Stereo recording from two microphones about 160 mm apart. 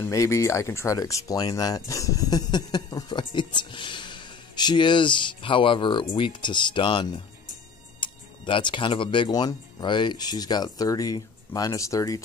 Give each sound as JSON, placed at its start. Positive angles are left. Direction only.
{"t": 0.0, "sound": "speech", "side_deg": 20}